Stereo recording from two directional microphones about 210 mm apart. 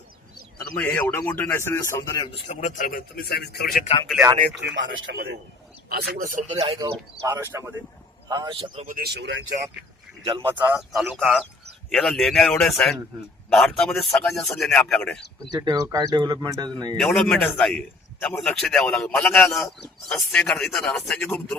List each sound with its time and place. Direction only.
0.8 s a man's voice: 5° left (ahead or behind); by 2.6 s 25° left (ahead or behind)
2.6 s a man's voice: 35° left (ahead or behind)
4.2 s speech: 20° right (ahead or behind)
4.5 s speech: 60° right (ahead or behind); by 6.4 s 45° right (ahead or behind)
6.5 s speech: 25° right (ahead or behind)
6.8 s speech: 15° right (ahead or behind); by 9.0 s 30° right (ahead or behind)
9.0 s speech: 55° right (ahead or behind)
10.4 s a man's voice: 10° right (ahead or behind)
15.5 s speech: 20° right (ahead or behind)
17.0 s a man's voice: centre (ahead or behind)